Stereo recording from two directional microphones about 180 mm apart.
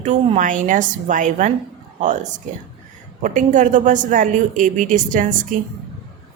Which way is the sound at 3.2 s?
45° right (ahead or behind).